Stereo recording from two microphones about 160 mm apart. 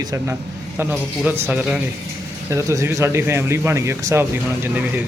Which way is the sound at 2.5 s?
20° right (ahead or behind).